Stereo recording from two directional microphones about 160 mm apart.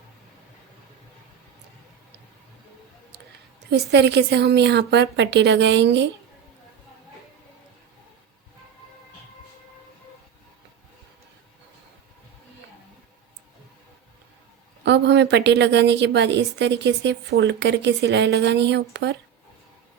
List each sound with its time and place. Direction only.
3.7 s a woman's voice: 90° right
14.8 s a woman's voice: 90° right